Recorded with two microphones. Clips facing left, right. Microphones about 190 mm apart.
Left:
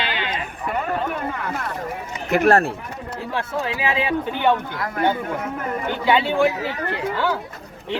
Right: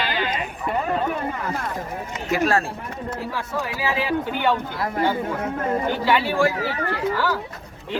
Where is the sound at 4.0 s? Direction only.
20° left (ahead or behind).